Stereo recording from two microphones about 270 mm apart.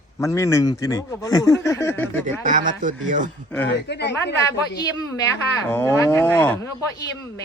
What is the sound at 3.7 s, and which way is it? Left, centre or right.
Speech, left.